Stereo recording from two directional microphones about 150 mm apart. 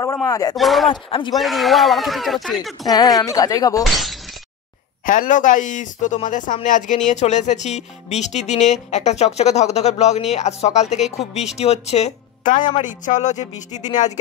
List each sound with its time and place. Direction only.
0.0 s speech: 25° left (ahead or behind)
0.6 s speech: centre (ahead or behind)
0.8 s speech: 35° left (ahead or behind)
1.3 s speech: centre (ahead or behind)
2.8 s speech: 25° left (ahead or behind)
3.8 s speech: centre (ahead or behind)
5.0 s speech: 65° left (ahead or behind)